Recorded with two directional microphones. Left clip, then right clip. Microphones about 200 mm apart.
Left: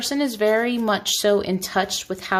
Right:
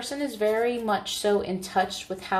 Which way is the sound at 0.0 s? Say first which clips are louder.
Left 6 dB; 50° left (ahead or behind).